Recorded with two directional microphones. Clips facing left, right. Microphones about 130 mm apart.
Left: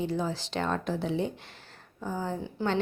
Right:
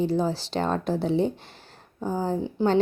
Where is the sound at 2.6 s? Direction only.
15° right (ahead or behind).